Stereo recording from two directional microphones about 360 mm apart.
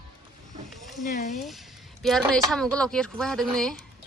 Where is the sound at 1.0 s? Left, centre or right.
Centre.